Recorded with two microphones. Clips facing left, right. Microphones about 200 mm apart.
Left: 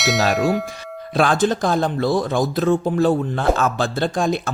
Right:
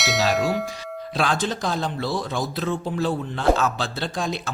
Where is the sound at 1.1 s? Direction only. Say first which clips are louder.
Left 7 dB; 50° left (ahead or behind).